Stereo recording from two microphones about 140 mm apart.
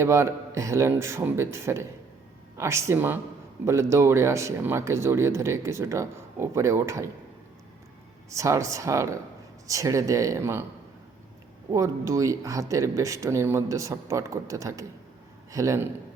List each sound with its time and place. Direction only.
0.0 s speech: 20° right (ahead or behind)
8.3 s speech: 20° right (ahead or behind)
11.7 s speech: 25° right (ahead or behind)